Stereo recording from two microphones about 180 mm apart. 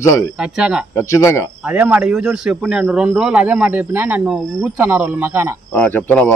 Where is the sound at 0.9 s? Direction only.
15° left (ahead or behind).